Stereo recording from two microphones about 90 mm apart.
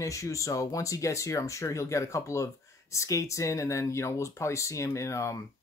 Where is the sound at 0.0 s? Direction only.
35° left (ahead or behind).